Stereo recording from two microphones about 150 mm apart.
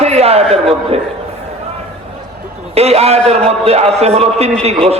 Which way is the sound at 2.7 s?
45° right (ahead or behind).